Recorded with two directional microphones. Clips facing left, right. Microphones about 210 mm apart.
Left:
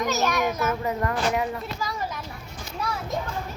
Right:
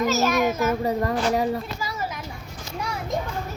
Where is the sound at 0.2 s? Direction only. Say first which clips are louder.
Right 3 dB; 10° right (ahead or behind).